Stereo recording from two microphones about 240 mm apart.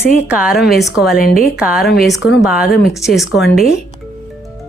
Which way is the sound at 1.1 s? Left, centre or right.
Left.